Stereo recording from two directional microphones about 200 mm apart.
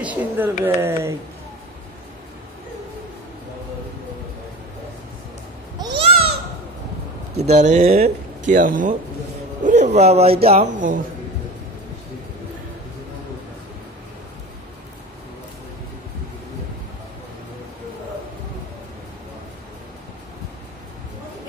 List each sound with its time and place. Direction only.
0.0 s speech: 5° right (ahead or behind)
5.8 s babbling: 25° right (ahead or behind)
7.4 s a man's voice: 35° right (ahead or behind)